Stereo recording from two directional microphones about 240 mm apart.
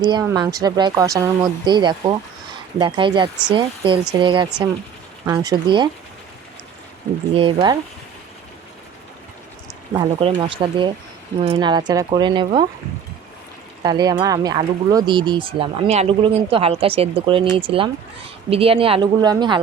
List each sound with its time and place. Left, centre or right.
0.0 s speech: centre
7.3 s speech: centre
9.9 s speech: right
13.8 s speech: centre